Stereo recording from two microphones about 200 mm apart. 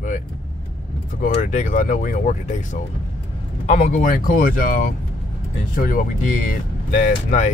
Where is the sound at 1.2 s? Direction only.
40° left (ahead or behind).